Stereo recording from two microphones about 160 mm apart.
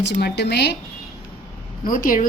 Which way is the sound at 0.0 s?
85° left.